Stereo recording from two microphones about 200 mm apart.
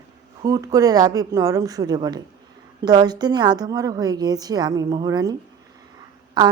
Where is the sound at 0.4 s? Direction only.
15° right (ahead or behind).